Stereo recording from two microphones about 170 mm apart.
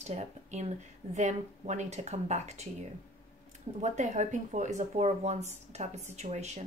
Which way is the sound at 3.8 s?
45° right (ahead or behind).